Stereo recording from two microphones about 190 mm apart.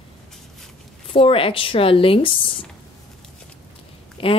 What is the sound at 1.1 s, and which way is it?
Speech, 30° left (ahead or behind).